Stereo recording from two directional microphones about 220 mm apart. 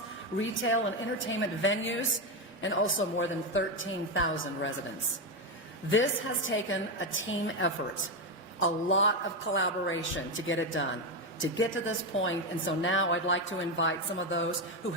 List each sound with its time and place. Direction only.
0.3 s a woman's voice: 60° left (ahead or behind)
5.9 s a woman's voice: 60° left (ahead or behind)